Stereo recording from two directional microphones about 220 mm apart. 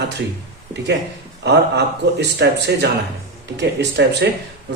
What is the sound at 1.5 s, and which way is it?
Speech, 50° right (ahead or behind).